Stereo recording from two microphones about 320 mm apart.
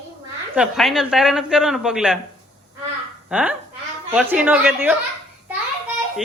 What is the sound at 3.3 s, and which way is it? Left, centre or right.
Speech, centre.